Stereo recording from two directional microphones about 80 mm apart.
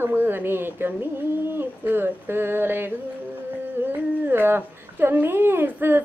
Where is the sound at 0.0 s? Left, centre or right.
Right.